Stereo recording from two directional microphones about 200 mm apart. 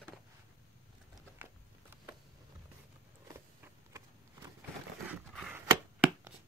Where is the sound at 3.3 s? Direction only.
15° right (ahead or behind).